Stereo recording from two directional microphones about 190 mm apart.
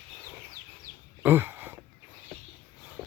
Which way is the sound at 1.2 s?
10° right (ahead or behind).